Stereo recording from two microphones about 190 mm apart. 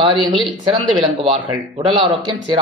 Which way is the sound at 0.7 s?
25° right (ahead or behind).